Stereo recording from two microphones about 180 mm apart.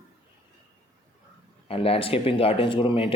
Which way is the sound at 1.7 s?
30° left (ahead or behind).